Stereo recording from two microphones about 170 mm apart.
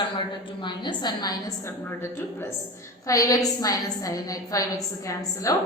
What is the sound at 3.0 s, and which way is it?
A woman's voice, 20° left (ahead or behind).